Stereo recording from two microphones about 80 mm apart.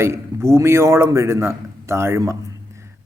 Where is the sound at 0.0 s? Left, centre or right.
Right.